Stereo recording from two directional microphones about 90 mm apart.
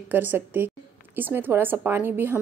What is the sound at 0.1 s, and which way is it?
A woman's voice, 20° right (ahead or behind).